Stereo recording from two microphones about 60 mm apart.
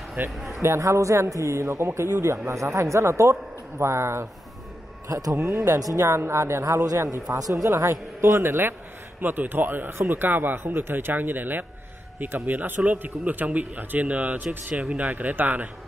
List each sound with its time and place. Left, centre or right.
0.2 s speech: right
0.5 s a man's voice: right
5.0 s a man's voice: right
5.8 s speech: right
6.0 s a man's voice: right
6.9 s a man's voice: right
7.3 s speech: right
7.7 s a man's voice: right